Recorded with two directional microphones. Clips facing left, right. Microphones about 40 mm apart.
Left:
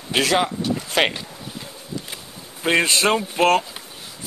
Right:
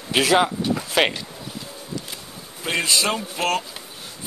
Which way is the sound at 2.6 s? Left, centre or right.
Left.